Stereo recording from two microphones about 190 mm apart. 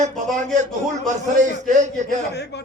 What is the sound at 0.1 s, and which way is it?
Speech, centre (ahead or behind).